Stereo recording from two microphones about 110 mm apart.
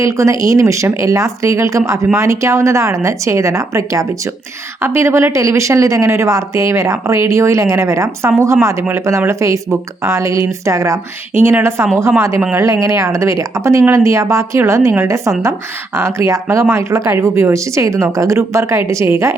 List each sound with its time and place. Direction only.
0.0 s speech: 25° right (ahead or behind)